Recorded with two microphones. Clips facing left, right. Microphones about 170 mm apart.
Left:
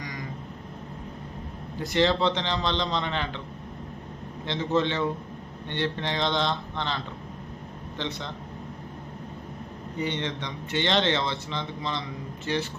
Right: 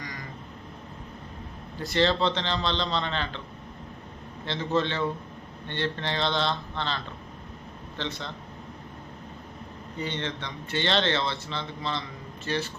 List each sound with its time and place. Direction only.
1.8 s speech: 15° left (ahead or behind)
4.4 s speech: 20° left (ahead or behind)
10.0 s speech: 15° left (ahead or behind)